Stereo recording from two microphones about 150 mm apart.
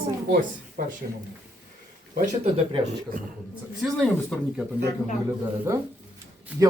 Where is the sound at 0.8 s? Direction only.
75° right (ahead or behind).